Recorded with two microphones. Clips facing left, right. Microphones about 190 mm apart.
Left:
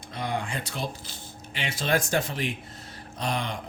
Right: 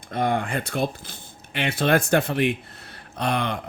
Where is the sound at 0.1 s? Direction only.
55° right (ahead or behind).